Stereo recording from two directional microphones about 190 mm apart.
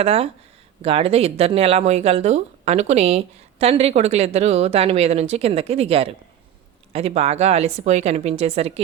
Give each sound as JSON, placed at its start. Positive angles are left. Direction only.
{"t": 0.0, "sound": "speech", "side_deg": -30}